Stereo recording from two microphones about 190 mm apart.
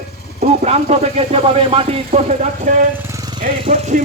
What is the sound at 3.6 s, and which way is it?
Speech, 35° right (ahead or behind).